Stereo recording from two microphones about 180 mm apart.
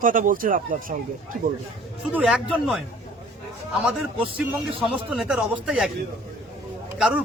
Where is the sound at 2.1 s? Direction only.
5° right (ahead or behind).